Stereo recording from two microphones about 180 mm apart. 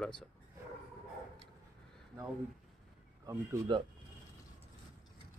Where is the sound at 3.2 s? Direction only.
20° right (ahead or behind).